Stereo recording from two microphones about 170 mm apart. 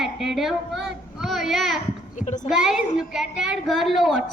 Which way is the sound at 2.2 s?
45° left (ahead or behind).